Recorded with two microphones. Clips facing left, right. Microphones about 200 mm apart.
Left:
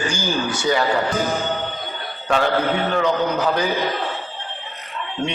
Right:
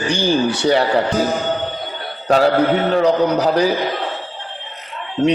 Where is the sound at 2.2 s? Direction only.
35° right (ahead or behind).